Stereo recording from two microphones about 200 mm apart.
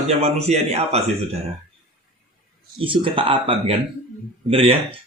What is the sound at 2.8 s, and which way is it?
Speech, 25° right (ahead or behind).